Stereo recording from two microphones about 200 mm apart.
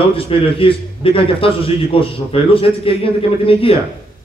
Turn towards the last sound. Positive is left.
turn(degrees=25)  # may be behind; listen again after turning